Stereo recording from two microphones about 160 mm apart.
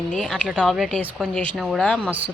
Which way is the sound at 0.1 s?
Centre (ahead or behind).